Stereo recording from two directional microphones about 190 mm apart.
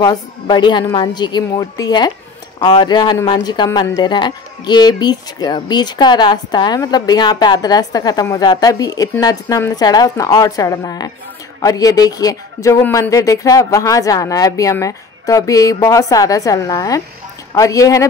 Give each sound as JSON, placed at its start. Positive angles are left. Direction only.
{"t": 0.0, "sound": "speech", "side_deg": 20}